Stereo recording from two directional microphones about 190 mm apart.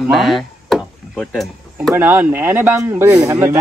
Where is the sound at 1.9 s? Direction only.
10° right (ahead or behind).